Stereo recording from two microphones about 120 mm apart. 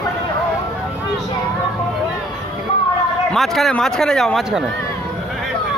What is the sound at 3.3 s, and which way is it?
Speech, centre (ahead or behind).